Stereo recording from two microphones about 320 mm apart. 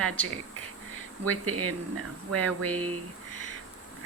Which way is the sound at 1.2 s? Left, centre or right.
Right.